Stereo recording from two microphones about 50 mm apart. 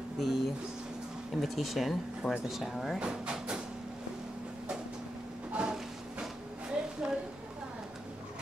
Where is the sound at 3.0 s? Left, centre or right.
Centre.